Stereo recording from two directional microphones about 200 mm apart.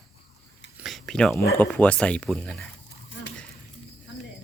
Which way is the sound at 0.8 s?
Centre (ahead or behind).